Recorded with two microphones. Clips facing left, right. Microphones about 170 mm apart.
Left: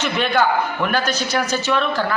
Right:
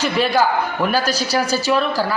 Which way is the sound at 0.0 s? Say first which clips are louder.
Right 3 dB; 35° right (ahead or behind).